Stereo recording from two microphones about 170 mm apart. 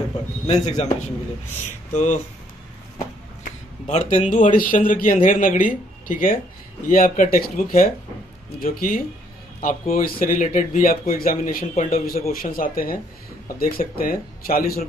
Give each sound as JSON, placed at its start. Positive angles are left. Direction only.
{"t": 0.5, "sound": "speech", "side_deg": 45}
{"t": 3.4, "sound": "speech", "side_deg": 45}
{"t": 11.7, "sound": "speech", "side_deg": 40}
{"t": 12.3, "sound": "speech", "side_deg": 55}